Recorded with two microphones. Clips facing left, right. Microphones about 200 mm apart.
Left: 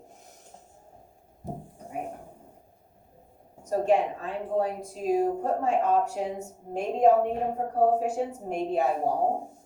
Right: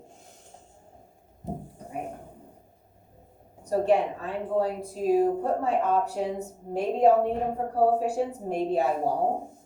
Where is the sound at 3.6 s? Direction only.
35° right (ahead or behind).